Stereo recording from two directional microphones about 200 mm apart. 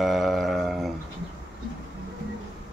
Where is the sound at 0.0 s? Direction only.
Centre (ahead or behind).